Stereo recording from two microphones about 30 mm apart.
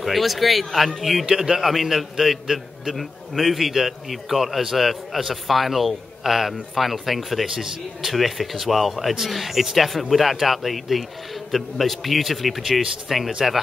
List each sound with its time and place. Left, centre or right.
0.0 s a man's voice: centre
1.2 s a man's voice: right
1.6 s a man's voice: centre
7.4 s a man's voice: centre
8.1 s a man's voice: centre